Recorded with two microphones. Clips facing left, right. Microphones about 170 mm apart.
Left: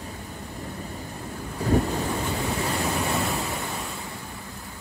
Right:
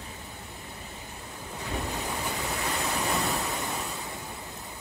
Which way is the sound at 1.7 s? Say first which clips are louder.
Left 10 dB; 40° left (ahead or behind).